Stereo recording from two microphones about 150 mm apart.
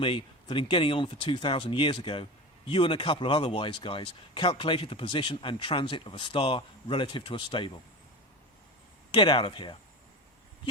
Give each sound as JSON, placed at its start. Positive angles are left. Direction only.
{"t": 0.0, "sound": "speech", "side_deg": 35}
{"t": 9.1, "sound": "speech", "side_deg": 35}